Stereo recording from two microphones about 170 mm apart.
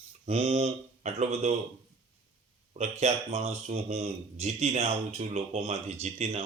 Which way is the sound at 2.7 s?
40° right (ahead or behind).